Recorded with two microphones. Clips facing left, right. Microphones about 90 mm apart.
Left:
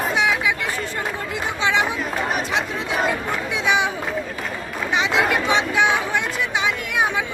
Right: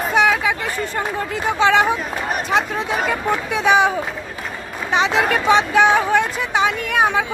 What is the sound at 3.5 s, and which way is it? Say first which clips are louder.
Speech: right 5 dB; 40° right (ahead or behind).